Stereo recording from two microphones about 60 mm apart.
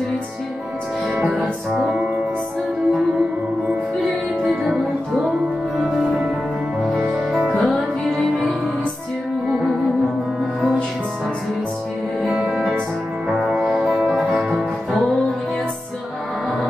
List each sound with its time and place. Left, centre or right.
1.1 s music: centre
4.5 s music: centre
7.3 s music: centre
12.2 s music: centre